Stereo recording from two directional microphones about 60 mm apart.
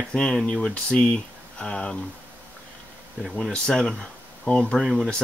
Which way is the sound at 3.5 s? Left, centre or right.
Centre.